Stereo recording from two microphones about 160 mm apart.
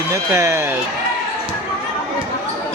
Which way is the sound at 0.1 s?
20° right (ahead or behind).